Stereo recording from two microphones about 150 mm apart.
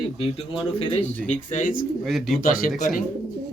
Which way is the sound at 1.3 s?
50° left (ahead or behind).